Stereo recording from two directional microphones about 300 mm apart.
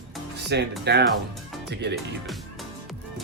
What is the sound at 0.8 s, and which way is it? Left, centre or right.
Speech, right.